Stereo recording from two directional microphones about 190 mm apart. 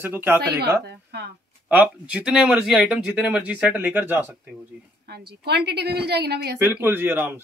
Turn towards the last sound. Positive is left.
turn(degrees=-10)  # may be behind; listen again after turning